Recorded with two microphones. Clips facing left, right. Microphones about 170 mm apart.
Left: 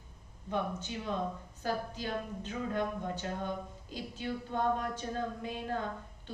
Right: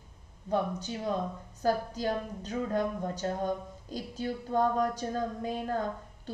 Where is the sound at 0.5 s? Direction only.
40° right (ahead or behind).